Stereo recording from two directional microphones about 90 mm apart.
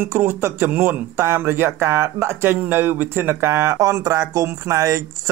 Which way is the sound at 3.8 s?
40° right (ahead or behind).